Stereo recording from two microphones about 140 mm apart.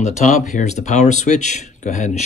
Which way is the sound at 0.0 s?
55° left (ahead or behind).